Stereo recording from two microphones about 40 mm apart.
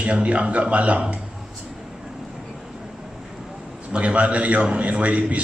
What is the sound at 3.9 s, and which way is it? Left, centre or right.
Speech, right.